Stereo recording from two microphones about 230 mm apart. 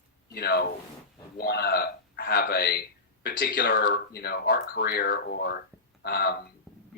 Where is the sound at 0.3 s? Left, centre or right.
Left.